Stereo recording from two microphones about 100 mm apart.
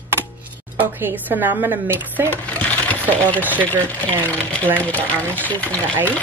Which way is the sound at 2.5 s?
15° left (ahead or behind).